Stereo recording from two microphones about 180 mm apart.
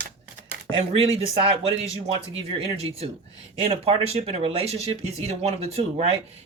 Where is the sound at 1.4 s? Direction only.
35° right (ahead or behind).